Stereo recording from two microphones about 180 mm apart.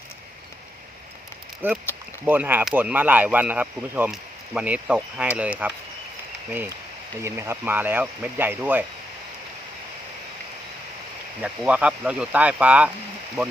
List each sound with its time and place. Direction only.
1.6 s speech: 10° right (ahead or behind)
11.4 s speech: 5° right (ahead or behind)